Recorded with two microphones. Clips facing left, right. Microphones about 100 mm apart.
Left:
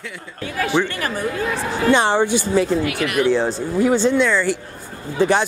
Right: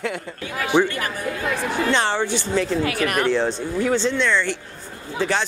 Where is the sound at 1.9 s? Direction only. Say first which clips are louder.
Left 5 dB; 15° left (ahead or behind).